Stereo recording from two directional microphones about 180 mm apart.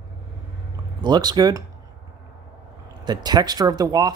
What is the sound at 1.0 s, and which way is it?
Speech, 25° right (ahead or behind).